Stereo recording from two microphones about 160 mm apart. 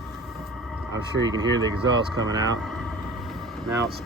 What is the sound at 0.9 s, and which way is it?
Speech, 25° right (ahead or behind).